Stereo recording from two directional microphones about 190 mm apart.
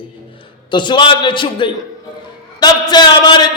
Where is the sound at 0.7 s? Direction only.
25° left (ahead or behind).